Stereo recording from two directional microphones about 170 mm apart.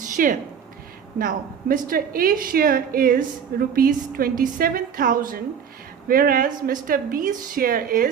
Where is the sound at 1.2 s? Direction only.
55° right (ahead or behind).